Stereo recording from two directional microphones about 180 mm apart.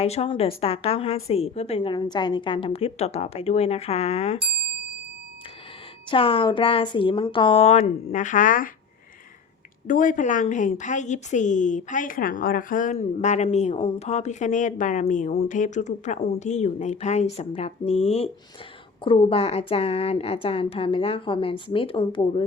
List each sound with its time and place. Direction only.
0.0 s a woman's voice: 35° left (ahead or behind)
6.1 s a woman's voice: 30° left (ahead or behind); by 8.7 s 50° left (ahead or behind)
9.8 s a woman's voice: 45° left (ahead or behind); by 22.4 s 25° left (ahead or behind)